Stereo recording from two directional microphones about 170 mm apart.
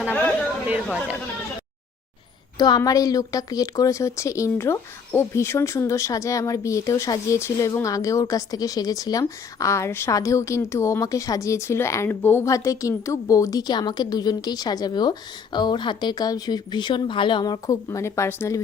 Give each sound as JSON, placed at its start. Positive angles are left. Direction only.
{"t": 0.1, "sound": "chatter", "side_deg": 10}
{"t": 2.6, "sound": "speech", "side_deg": 25}